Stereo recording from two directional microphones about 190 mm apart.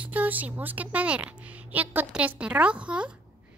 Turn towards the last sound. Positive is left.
turn(degrees=-5)  # may be behind; listen again after turning